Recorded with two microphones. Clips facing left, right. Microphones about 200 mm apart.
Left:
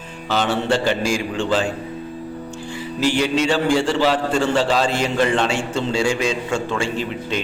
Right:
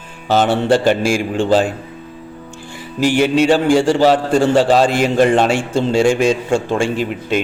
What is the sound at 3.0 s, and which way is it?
A man's voice, 55° right (ahead or behind).